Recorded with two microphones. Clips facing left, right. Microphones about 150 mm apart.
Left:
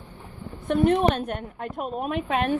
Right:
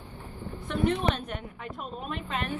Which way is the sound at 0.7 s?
55° left (ahead or behind).